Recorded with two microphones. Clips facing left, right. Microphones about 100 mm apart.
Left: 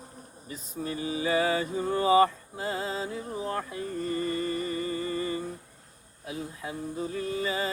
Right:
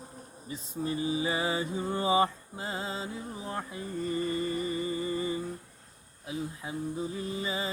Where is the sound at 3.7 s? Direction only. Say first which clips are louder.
Left 2 dB; 15° right (ahead or behind).